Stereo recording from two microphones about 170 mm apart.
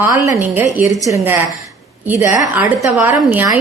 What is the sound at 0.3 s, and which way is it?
A woman's voice, 10° right (ahead or behind).